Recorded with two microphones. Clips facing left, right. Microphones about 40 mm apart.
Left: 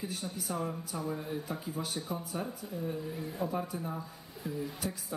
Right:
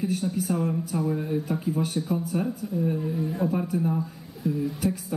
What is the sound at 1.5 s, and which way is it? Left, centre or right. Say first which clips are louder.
Speech: right 10 dB; right.